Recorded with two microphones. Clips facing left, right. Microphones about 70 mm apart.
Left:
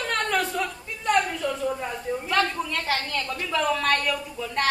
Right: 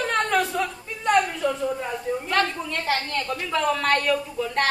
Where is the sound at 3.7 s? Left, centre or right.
Centre.